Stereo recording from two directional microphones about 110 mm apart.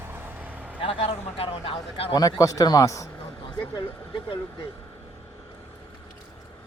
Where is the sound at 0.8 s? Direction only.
60° left (ahead or behind).